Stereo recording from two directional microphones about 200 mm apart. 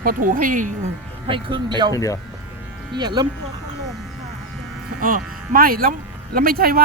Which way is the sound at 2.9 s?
20° right (ahead or behind).